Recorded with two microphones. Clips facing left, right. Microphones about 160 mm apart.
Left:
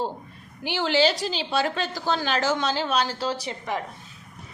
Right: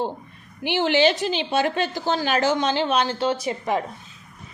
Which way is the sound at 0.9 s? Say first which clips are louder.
Right 2 dB; 40° left (ahead or behind).